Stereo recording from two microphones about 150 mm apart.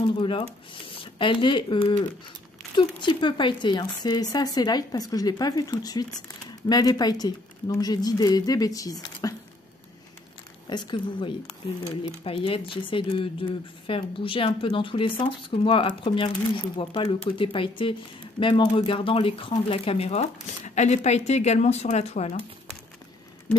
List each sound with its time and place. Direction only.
0.0 s speech: 35° left (ahead or behind)
10.7 s speech: 30° left (ahead or behind)